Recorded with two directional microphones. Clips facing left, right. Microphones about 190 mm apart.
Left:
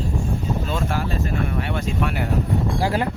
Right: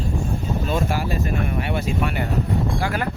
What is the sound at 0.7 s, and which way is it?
Speech, 10° right (ahead or behind).